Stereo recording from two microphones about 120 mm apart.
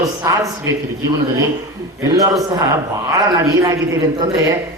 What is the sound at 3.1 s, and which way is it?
Speech, 30° right (ahead or behind).